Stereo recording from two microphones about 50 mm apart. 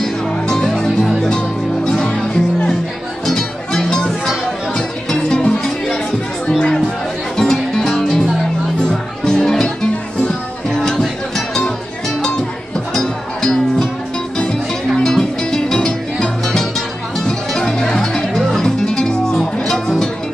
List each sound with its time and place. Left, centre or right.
0.0 s music: centre
2.0 s music: centre
7.3 s music: centre
10.8 s music: centre
12.9 s music: centre
15.0 s music: centre